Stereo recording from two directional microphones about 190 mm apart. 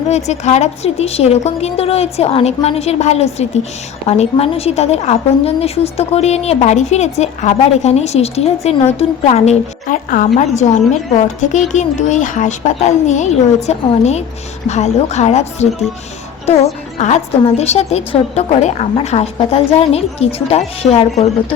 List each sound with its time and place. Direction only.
0.1 s a woman's voice: 35° left (ahead or behind)
17.0 s a woman's voice: 35° left (ahead or behind)